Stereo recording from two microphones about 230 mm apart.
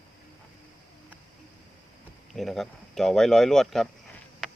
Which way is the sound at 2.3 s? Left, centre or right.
Centre.